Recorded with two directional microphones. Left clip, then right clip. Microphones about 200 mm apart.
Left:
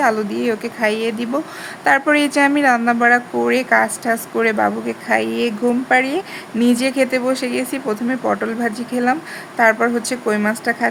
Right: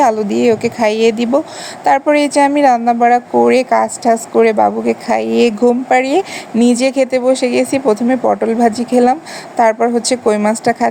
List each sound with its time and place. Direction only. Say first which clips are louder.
0.0 s a woman's voice: right 6 dB; 25° right (ahead or behind)